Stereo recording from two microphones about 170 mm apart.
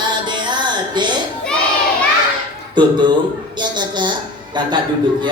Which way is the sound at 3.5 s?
25° right (ahead or behind).